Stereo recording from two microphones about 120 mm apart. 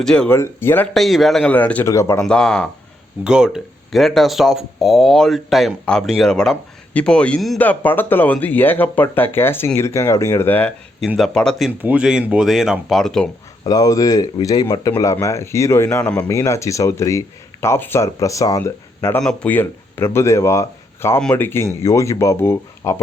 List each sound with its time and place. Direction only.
0.0 s speech: 5° left (ahead or behind)
0.3 s speech: 20° left (ahead or behind)
0.9 s speech: centre (ahead or behind)
1.5 s speech: 15° left (ahead or behind)
1.9 s speech: 25° left (ahead or behind)
2.2 s speech: 5° left (ahead or behind)
3.2 s speech: 5° right (ahead or behind); by 10.7 s 15° left (ahead or behind)
11.2 s speech: 5° left (ahead or behind)
11.8 s speech: 10° right (ahead or behind); by 13.3 s 5° left (ahead or behind)
13.7 s speech: 30° left (ahead or behind)
19.2 s speech: 5° left (ahead or behind); by 21.2 s 25° left (ahead or behind)
21.2 s speech: 5° left (ahead or behind)
21.4 s speech: 20° left (ahead or behind)